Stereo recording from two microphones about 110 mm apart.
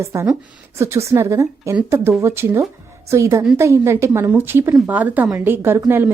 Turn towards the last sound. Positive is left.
turn(degrees=-20)  # may be behind; listen again after turning